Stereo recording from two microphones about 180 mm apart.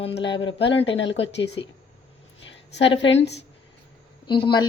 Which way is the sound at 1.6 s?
90° left.